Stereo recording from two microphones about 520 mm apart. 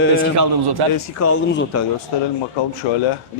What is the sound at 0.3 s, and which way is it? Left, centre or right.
Speech, right.